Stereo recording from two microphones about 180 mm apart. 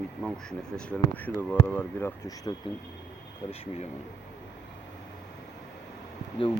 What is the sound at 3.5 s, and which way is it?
Speech, 35° left (ahead or behind).